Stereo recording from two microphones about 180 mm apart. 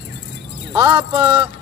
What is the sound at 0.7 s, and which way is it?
Speech, 20° right (ahead or behind).